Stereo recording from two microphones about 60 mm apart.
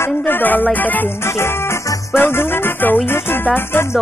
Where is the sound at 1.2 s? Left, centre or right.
Left.